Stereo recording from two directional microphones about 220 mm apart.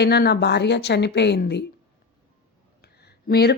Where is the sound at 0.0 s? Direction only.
45° left (ahead or behind).